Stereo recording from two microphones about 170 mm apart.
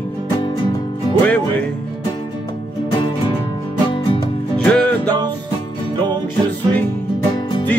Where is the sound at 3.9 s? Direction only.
30° left (ahead or behind).